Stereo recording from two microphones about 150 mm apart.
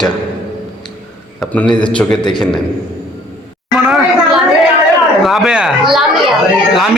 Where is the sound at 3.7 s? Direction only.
Centre (ahead or behind).